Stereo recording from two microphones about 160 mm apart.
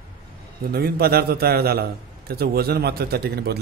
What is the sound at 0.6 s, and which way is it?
A man's voice, 75° right (ahead or behind).